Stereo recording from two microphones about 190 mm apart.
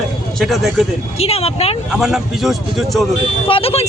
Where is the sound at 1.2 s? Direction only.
30° left (ahead or behind).